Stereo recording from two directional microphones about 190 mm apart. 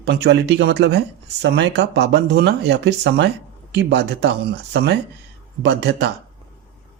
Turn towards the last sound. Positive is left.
turn(degrees=-65)  # may be behind; listen again after turning